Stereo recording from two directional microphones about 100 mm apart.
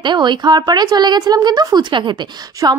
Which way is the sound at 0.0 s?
50° right (ahead or behind).